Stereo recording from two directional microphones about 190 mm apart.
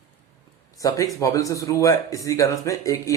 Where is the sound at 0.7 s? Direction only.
15° left (ahead or behind).